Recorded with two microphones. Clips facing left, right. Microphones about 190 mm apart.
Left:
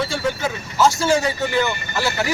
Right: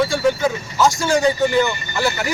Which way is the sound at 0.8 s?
5° left (ahead or behind).